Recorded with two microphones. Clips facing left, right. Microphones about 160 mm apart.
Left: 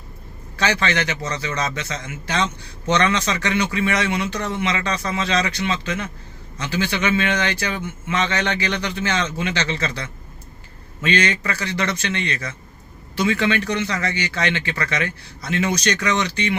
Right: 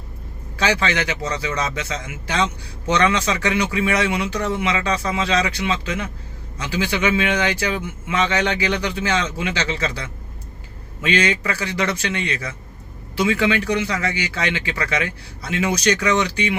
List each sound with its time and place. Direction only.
0.5 s a man's voice: 10° right (ahead or behind)